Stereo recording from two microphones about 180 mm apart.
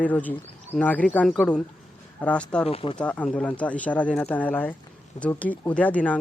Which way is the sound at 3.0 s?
5° left (ahead or behind).